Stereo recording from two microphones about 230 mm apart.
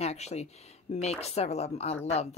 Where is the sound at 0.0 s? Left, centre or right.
Left.